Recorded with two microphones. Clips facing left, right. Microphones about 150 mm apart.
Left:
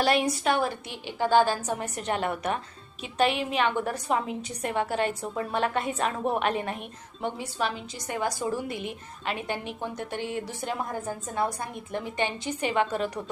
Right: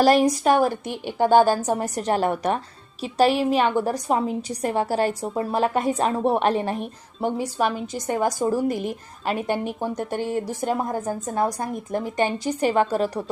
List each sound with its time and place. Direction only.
0.0 s a woman's voice: 40° right (ahead or behind)